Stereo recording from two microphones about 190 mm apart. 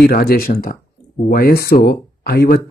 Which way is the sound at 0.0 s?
55° left (ahead or behind).